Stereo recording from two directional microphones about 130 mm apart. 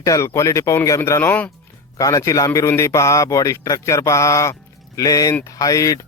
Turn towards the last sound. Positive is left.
turn(degrees=25)  # may be behind; listen again after turning